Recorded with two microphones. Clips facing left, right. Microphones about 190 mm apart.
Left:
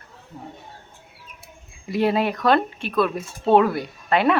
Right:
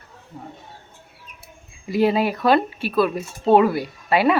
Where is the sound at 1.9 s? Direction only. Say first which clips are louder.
Right 2 dB; centre (ahead or behind).